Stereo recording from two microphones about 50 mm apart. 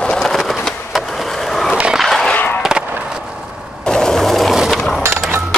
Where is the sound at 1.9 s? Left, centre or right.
Centre.